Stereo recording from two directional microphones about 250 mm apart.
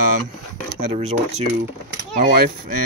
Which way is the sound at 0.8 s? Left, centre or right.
Right.